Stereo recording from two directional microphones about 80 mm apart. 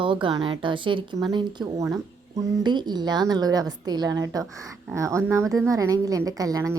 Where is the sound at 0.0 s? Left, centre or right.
Right.